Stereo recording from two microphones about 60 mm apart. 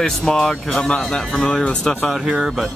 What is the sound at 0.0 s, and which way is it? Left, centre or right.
Speech, centre.